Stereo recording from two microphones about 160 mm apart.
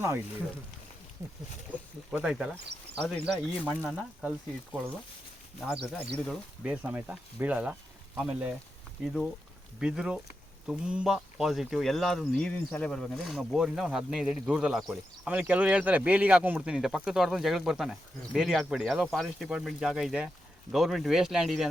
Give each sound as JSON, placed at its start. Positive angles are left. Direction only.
{"t": 0.0, "sound": "speech", "side_deg": -15}
{"t": 2.0, "sound": "speech", "side_deg": -5}
{"t": 3.3, "sound": "speech", "side_deg": 10}
{"t": 4.2, "sound": "speech", "side_deg": -10}
{"t": 9.8, "sound": "speech", "side_deg": -5}